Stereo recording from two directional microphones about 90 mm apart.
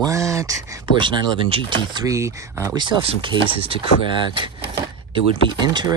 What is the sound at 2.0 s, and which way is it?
Speech, 35° right (ahead or behind).